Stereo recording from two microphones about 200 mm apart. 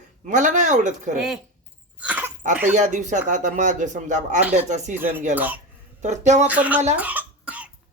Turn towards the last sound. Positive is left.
turn(degrees=-5)  # may be behind; listen again after turning